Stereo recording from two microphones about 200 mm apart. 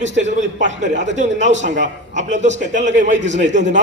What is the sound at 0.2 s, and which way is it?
A man's voice, 35° right (ahead or behind).